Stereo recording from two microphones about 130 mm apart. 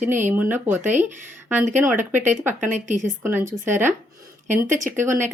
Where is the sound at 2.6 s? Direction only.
70° right (ahead or behind).